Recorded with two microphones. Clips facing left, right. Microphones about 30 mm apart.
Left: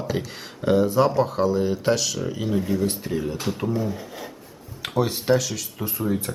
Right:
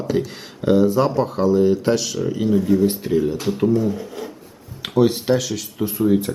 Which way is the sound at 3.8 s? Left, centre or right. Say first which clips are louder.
Right 6 dB; centre.